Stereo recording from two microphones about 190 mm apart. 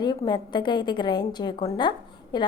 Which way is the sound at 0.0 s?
20° left (ahead or behind).